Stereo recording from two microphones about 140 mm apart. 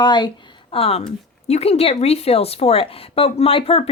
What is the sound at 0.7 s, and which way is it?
Speech, 45° left (ahead or behind).